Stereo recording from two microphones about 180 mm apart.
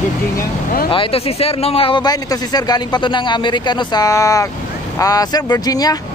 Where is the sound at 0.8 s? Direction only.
30° left (ahead or behind).